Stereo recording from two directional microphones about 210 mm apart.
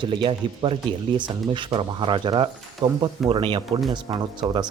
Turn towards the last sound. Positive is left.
turn(degrees=0)  # may be behind; listen again after turning